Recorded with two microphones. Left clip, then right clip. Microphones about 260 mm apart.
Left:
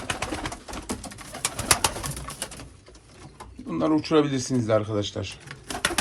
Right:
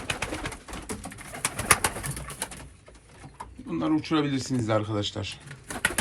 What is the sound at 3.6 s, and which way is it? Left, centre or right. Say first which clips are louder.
Speech: left 3 dB; centre.